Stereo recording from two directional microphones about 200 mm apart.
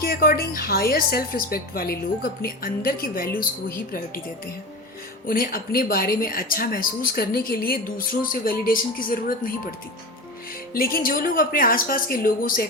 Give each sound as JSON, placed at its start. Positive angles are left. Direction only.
{"t": 0.0, "sound": "speech", "side_deg": 50}
{"t": 5.2, "sound": "speech", "side_deg": 45}
{"t": 10.8, "sound": "speech", "side_deg": 45}